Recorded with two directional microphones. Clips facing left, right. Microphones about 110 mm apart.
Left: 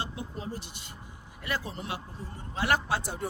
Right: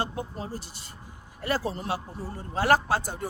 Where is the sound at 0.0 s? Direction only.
40° right (ahead or behind).